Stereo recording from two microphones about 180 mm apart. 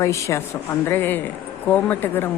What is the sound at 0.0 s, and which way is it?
A woman's voice, 15° left (ahead or behind).